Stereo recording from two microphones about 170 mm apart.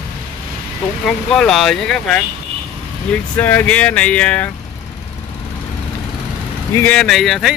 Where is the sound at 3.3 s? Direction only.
10° left (ahead or behind).